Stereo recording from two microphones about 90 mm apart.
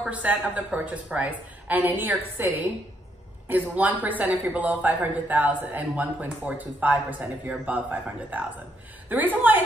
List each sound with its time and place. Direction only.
0.1 s a woman's voice: 15° right (ahead or behind)
3.4 s a woman's voice: 20° right (ahead or behind)